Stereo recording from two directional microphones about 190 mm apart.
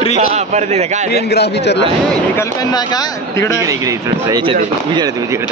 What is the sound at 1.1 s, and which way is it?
Speech, 60° left (ahead or behind).